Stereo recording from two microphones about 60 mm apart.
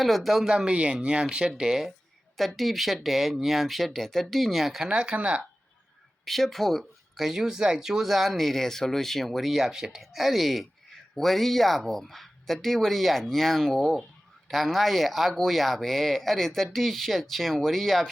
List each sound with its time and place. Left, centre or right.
0.0 s speech: centre
0.5 s speech: centre
2.3 s speech: centre
4.9 s speech: centre
6.2 s speech: centre